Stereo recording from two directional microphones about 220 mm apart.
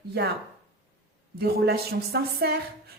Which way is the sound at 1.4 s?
45° right (ahead or behind).